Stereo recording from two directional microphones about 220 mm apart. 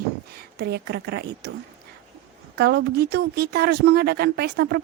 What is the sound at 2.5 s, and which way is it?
Speech, 50° right (ahead or behind).